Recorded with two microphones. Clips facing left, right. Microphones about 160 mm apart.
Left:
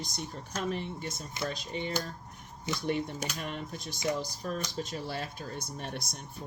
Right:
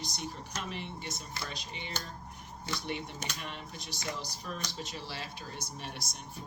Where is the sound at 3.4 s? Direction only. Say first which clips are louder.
Left 5 dB; 45° left (ahead or behind).